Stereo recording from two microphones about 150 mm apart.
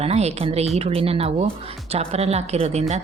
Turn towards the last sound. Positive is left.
turn(degrees=-45)  # may be behind; listen again after turning